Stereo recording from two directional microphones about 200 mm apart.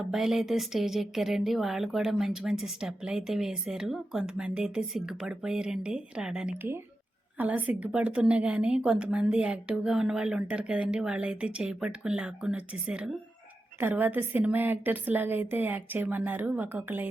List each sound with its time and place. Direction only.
0.1 s a woman's voice: centre (ahead or behind)